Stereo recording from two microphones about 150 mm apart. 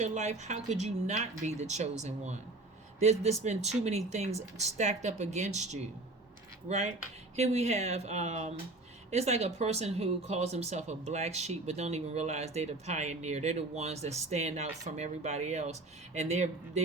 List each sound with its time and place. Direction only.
0.0 s speech: 50° right (ahead or behind)